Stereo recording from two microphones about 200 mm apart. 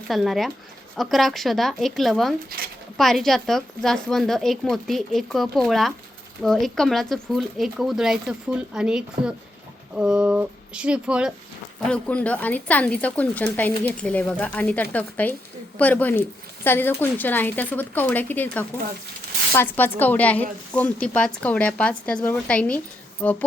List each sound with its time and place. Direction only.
0.1 s speech: centre (ahead or behind)
11.9 s speech: 5° left (ahead or behind)
19.5 s speech: 10° left (ahead or behind)